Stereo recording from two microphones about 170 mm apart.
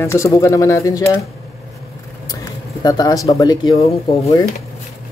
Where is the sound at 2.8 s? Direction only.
25° left (ahead or behind).